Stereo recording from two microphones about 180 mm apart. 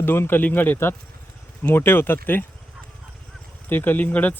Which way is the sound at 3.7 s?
10° left (ahead or behind).